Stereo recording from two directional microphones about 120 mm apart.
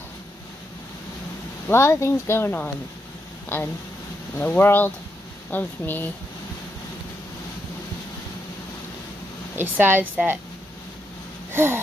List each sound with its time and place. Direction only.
1.7 s speech: 25° left (ahead or behind)
9.6 s a woman's voice: 15° right (ahead or behind)
11.5 s wheeze: 20° right (ahead or behind)